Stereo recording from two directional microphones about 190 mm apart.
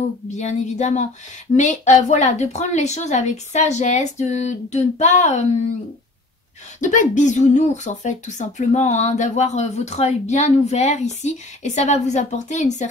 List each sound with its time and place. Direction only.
0.3 s speech: 35° left (ahead or behind)
6.8 s speech: 40° left (ahead or behind)